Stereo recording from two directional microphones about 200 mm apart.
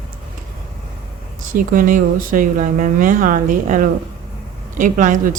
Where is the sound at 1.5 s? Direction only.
45° right (ahead or behind).